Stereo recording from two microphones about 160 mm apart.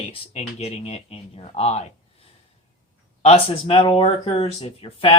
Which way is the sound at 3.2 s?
35° left (ahead or behind).